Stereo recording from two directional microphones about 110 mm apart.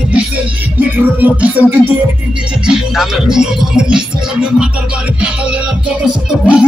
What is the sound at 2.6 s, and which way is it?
Speech, 5° right (ahead or behind).